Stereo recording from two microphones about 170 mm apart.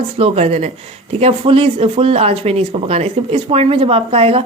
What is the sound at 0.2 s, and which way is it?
Speech, 35° right (ahead or behind).